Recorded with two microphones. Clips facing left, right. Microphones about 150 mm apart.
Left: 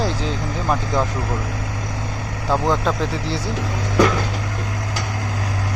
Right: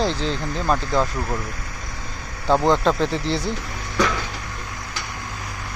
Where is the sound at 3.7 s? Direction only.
90° left.